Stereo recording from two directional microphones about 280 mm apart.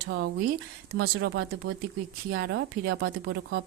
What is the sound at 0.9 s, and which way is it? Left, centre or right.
A woman's voice, right.